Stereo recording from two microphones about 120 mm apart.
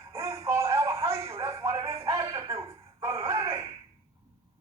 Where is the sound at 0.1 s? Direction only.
25° right (ahead or behind).